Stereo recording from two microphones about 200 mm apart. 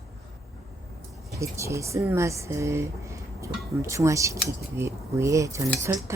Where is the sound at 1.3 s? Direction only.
15° right (ahead or behind).